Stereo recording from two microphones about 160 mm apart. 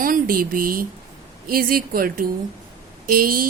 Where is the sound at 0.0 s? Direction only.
60° right (ahead or behind).